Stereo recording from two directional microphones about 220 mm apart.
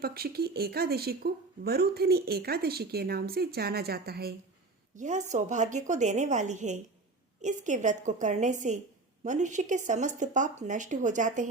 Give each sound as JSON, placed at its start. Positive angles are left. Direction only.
{"t": 0.0, "sound": "speech", "side_deg": -45}
{"t": 4.9, "sound": "speech", "side_deg": -35}